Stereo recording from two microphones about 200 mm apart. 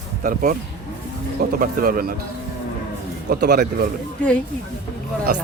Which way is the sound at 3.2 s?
50° right (ahead or behind).